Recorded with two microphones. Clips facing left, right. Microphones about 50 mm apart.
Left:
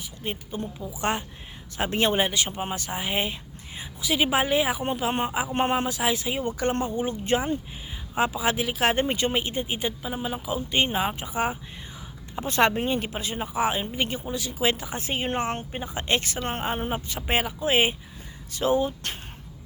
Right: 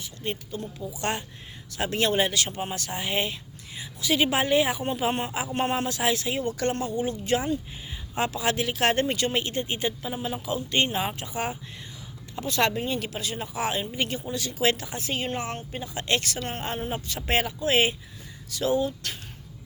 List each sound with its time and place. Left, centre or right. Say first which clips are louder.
0.5 s a woman's voice: left 2 dB; left
0.9 s speech: left 2 dB; centre
5.5 s a woman's voice: even; left
5.7 s a woman's voice: left 1 dB; centre
8.1 s speech: left 2 dB; centre
12.5 s a woman's voice: left 3 dB; left; by 14.9 s centre
14.9 s a woman's voice: left 2 dB; left